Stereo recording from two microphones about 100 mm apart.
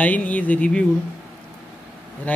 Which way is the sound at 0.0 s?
15° left (ahead or behind).